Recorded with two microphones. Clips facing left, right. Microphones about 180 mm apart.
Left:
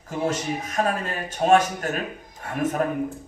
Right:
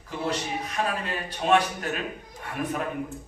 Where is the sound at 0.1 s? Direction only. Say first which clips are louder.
Left 4 dB; 45° left (ahead or behind).